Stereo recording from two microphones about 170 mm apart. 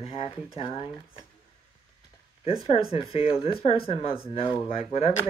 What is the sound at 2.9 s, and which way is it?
Speech, 35° left (ahead or behind).